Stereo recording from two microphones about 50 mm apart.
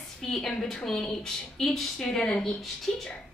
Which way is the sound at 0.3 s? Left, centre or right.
Centre.